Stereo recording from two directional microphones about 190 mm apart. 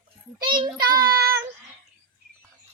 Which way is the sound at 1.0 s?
50° right (ahead or behind).